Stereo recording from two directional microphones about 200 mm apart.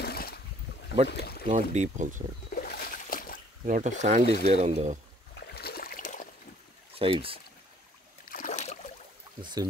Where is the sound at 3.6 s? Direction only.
40° right (ahead or behind).